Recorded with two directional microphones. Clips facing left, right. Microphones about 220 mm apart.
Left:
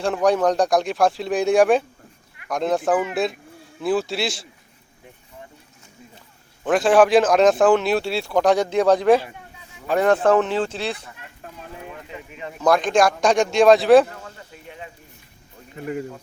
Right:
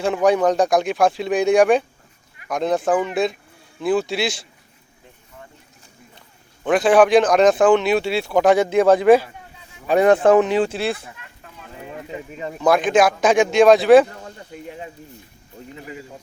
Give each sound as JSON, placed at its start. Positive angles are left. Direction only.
{"t": 0.0, "sound": "speech", "side_deg": 0}
{"t": 6.7, "sound": "speech", "side_deg": 0}
{"t": 9.8, "sound": "speech", "side_deg": -15}
{"t": 12.3, "sound": "a man's voice", "side_deg": -40}
{"t": 12.5, "sound": "speech", "side_deg": 0}